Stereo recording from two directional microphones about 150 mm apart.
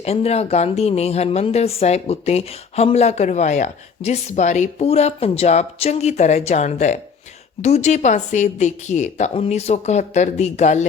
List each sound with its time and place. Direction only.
0.0 s speech: 45° left (ahead or behind)